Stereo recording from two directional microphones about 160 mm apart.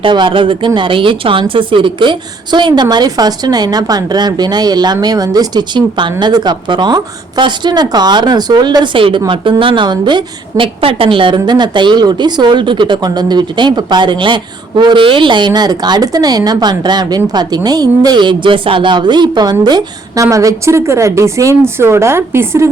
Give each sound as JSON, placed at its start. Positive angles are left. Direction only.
{"t": 0.0, "sound": "speech", "side_deg": -30}